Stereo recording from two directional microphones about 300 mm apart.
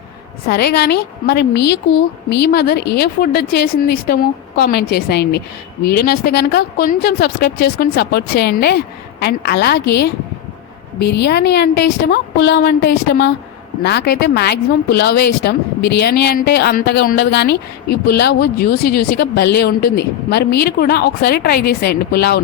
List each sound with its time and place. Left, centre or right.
0.4 s a woman's voice: left